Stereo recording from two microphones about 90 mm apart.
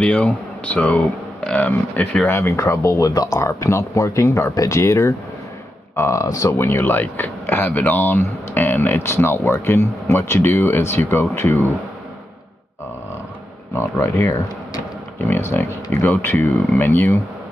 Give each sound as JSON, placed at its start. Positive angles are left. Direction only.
{"t": 0.0, "sound": "speech", "side_deg": 15}
{"t": 2.3, "sound": "speech", "side_deg": 30}
{"t": 13.7, "sound": "speech", "side_deg": 30}